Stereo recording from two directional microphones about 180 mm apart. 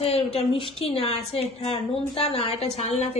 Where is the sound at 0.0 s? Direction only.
35° left (ahead or behind).